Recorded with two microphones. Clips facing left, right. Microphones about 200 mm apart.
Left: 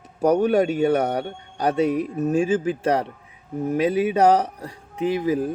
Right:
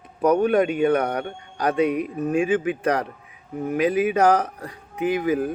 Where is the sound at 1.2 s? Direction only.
30° left (ahead or behind).